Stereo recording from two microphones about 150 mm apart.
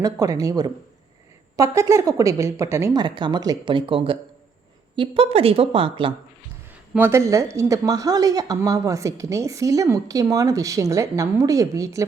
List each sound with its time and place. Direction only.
0.0 s a woman's voice: 25° right (ahead or behind)
2.9 s speech: 30° right (ahead or behind)
6.9 s a woman's voice: 15° right (ahead or behind)